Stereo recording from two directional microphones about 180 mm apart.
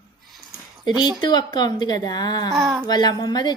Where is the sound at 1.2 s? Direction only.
25° left (ahead or behind).